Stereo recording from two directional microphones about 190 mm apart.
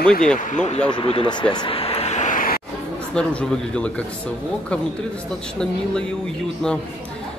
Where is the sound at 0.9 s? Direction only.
25° left (ahead or behind).